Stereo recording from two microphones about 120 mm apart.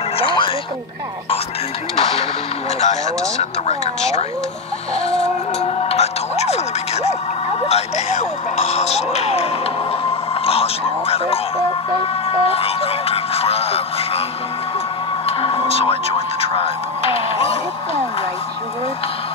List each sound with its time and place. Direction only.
0.2 s music: 45° left (ahead or behind)
2.0 s speech: 60° left (ahead or behind)
2.8 s speech: 70° left (ahead or behind)
4.9 s music: 5° left (ahead or behind)
5.9 s a sound: 65° left (ahead or behind)
12.3 s speech: 55° left (ahead or behind)
15.2 s music: 55° left (ahead or behind)